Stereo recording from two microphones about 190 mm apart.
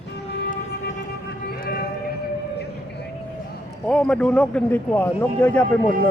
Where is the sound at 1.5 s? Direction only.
50° left (ahead or behind).